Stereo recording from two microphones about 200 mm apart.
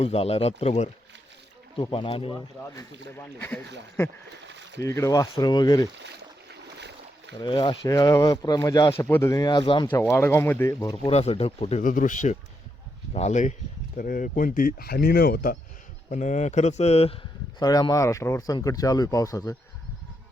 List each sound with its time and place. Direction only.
0.0 s speech: 30° left (ahead or behind)
4.0 s speech: 15° left (ahead or behind)
4.4 s a sound: 60° right (ahead or behind)
4.8 s speech: 15° left (ahead or behind)
6.5 s boat: 60° right (ahead or behind)
7.3 s speech: 25° left (ahead or behind)
9.0 s speech: 10° left (ahead or behind); by 11.8 s 30° left (ahead or behind)
11.8 s speech: 40° left (ahead or behind)
17.6 s speech: 20° left (ahead or behind)